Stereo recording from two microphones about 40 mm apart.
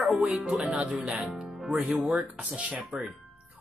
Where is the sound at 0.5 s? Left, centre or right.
Right.